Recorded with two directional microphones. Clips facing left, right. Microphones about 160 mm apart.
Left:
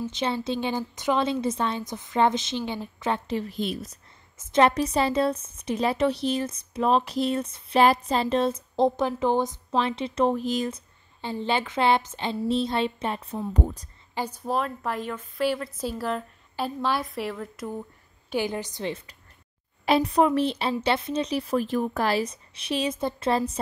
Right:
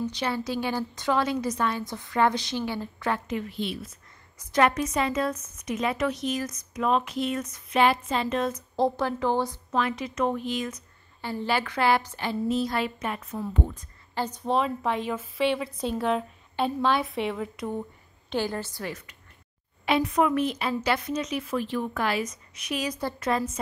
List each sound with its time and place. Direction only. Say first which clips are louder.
0.1 s a woman's voice: left 2 dB; 25° left (ahead or behind)
3.3 s a woman's voice: left 2 dB; 35° left (ahead or behind)
4.4 s a woman's voice: left 2 dB; 25° left (ahead or behind)
11.1 s a woman's voice: left 1 dB; 20° left (ahead or behind); by 13.8 s 40° left (ahead or behind)
14.1 s a woman's voice: right 2 dB; 10° left (ahead or behind)
18.3 s a woman's voice: left 1 dB; 15° left (ahead or behind); by 23.6 s 30° left (ahead or behind)